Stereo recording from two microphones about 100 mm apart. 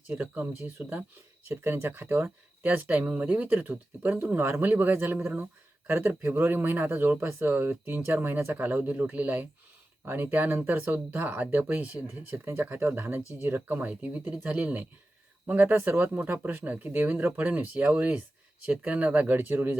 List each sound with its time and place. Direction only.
0.1 s speech: 20° right (ahead or behind)